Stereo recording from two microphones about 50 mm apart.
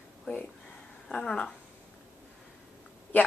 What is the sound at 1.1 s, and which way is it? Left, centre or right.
Speech, centre.